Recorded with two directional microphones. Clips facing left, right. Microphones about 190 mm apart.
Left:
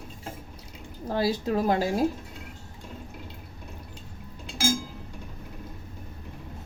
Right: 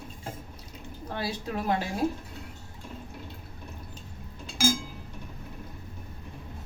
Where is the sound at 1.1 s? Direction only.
35° left (ahead or behind).